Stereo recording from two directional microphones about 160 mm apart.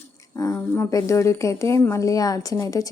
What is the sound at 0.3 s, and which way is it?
Speech, 20° left (ahead or behind).